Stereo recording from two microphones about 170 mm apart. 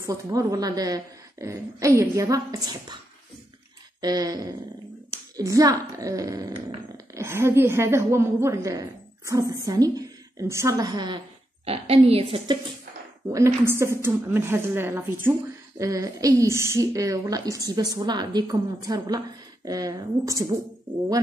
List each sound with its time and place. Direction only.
0.0 s a woman's voice: 20° right (ahead or behind)
4.0 s a woman's voice: 20° right (ahead or behind)
11.6 s a woman's voice: 35° right (ahead or behind)
13.3 s a woman's voice: 15° right (ahead or behind)